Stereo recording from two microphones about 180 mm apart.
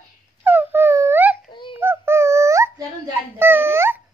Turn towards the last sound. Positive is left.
turn(degrees=-15)  # may be behind; listen again after turning